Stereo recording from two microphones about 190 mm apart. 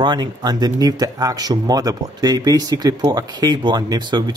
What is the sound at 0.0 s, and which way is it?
Speech, 20° right (ahead or behind).